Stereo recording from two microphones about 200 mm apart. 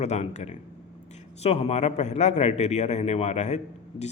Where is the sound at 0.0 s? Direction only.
35° left (ahead or behind).